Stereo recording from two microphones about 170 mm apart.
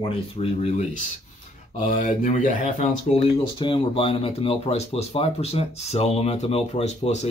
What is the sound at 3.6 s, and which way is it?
Speech, 30° left (ahead or behind).